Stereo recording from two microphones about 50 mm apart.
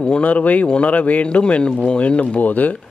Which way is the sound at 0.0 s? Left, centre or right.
Left.